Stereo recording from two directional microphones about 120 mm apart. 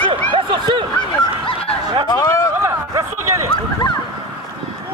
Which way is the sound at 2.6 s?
25° right (ahead or behind).